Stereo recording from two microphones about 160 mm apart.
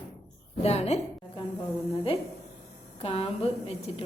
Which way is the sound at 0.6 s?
40° left (ahead or behind).